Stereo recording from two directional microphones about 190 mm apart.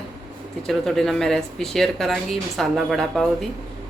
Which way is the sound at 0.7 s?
Centre (ahead or behind).